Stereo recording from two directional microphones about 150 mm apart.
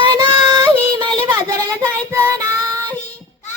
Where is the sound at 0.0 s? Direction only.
30° right (ahead or behind).